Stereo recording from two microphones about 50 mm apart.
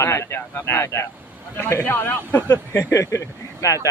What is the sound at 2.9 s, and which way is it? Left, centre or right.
Speech, left.